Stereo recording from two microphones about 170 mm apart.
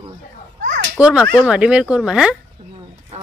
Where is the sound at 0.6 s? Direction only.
60° right (ahead or behind).